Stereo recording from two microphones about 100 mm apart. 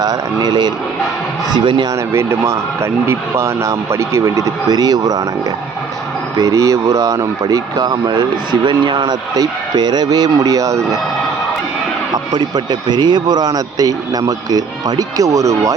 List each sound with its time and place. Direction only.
0.0 s a man's voice: 40° right (ahead or behind)
2.1 s speech: 30° right (ahead or behind)
6.3 s speech: 35° right (ahead or behind)
12.1 s speech: 45° right (ahead or behind)